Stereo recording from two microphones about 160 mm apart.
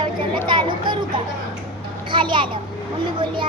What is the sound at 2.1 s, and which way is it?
Speech, 30° right (ahead or behind).